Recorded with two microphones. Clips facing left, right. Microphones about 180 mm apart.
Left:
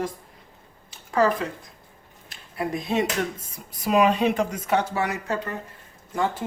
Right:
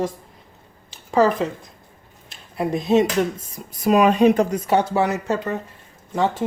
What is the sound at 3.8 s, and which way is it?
Speech, 50° right (ahead or behind).